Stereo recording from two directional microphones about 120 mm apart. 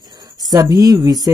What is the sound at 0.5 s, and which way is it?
Speech, 30° right (ahead or behind).